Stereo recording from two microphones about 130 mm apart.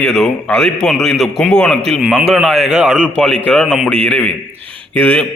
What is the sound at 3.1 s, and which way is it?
A man's voice, 10° left (ahead or behind).